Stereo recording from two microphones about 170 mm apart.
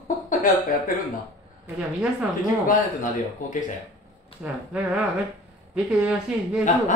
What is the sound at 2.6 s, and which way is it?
Speech, 50° left (ahead or behind).